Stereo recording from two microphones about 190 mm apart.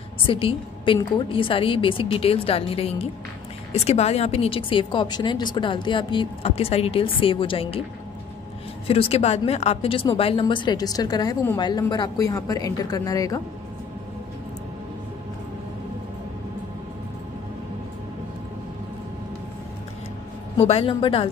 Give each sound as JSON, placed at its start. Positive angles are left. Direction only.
{"t": 0.2, "sound": "a woman's voice", "side_deg": 30}
{"t": 8.8, "sound": "a woman's voice", "side_deg": 30}
{"t": 20.5, "sound": "a woman's voice", "side_deg": 30}